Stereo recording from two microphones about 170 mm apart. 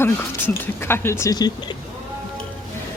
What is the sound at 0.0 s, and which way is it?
A woman's voice, 15° left (ahead or behind).